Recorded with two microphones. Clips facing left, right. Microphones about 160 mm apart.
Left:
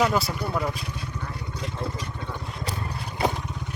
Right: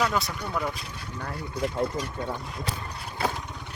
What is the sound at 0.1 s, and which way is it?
Speech, 5° left (ahead or behind).